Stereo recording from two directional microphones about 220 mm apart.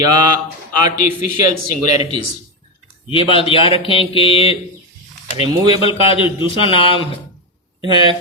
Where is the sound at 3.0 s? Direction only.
25° left (ahead or behind).